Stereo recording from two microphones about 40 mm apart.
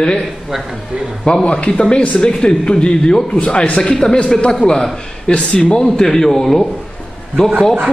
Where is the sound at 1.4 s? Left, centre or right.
Left.